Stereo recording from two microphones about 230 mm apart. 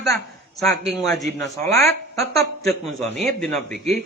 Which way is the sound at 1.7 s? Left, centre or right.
Centre.